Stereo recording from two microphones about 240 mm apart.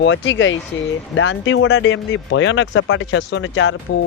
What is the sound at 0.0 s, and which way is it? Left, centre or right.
Speech, left.